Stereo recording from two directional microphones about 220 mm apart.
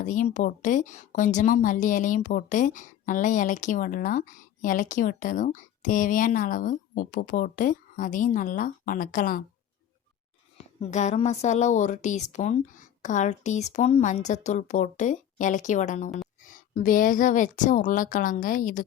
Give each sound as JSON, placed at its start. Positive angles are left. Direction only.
{"t": 0.0, "sound": "a woman's voice", "side_deg": 35}
{"t": 10.8, "sound": "a woman's voice", "side_deg": 30}